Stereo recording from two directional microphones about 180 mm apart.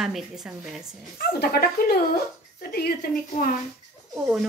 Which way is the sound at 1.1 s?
60° left (ahead or behind).